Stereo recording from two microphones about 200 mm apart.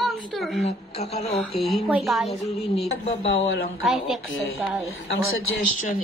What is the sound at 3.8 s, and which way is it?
Speech, centre (ahead or behind).